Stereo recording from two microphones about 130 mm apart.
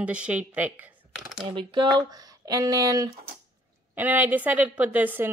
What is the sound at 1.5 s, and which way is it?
Speech, 35° right (ahead or behind).